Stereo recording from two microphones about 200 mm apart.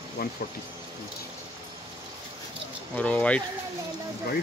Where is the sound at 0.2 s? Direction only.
50° left (ahead or behind).